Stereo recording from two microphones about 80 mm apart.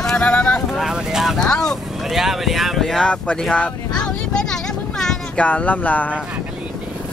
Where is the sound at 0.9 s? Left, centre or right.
Centre.